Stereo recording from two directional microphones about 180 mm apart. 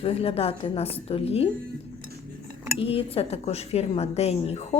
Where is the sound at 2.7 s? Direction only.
30° left (ahead or behind).